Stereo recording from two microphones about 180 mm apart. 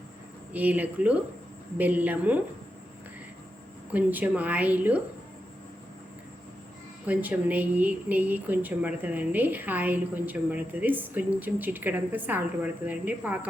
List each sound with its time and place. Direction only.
0.5 s speech: 10° right (ahead or behind)
3.9 s speech: 10° right (ahead or behind)
7.1 s speech: 10° right (ahead or behind)